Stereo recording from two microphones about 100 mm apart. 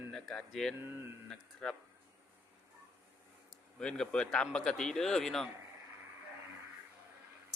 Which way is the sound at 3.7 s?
5° left (ahead or behind).